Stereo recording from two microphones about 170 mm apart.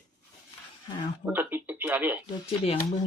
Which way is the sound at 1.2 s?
10° right (ahead or behind).